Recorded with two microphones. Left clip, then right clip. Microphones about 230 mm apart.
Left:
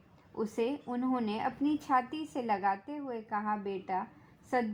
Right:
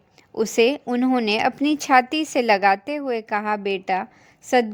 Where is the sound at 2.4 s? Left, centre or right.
Right.